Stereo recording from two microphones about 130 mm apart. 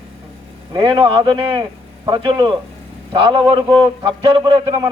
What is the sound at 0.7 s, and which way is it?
A man's voice, 40° right (ahead or behind).